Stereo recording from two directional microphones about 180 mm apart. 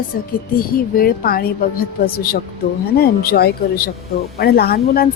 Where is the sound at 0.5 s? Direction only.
55° left (ahead or behind).